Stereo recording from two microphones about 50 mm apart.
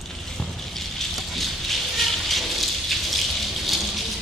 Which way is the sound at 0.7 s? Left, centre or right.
Centre.